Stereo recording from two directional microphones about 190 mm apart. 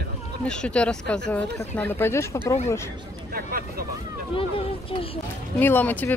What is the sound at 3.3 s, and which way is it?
Speech, 50° right (ahead or behind).